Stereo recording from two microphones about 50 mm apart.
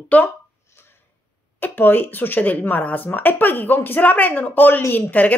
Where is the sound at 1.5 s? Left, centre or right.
Left.